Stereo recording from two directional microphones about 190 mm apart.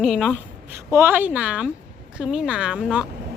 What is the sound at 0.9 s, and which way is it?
Speech, 10° right (ahead or behind).